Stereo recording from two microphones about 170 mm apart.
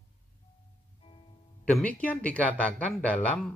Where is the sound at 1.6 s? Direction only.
10° left (ahead or behind).